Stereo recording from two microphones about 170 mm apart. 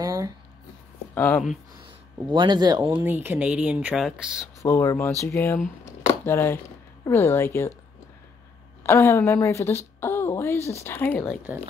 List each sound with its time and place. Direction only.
0.0 s a sound: 20° right (ahead or behind)
1.1 s speech: 10° left (ahead or behind)
2.3 s speech: 25° right (ahead or behind)
3.0 s speech: 10° right (ahead or behind)
4.6 s a woman's voice: 15° left (ahead or behind)
8.8 s a woman's voice: 15° left (ahead or behind)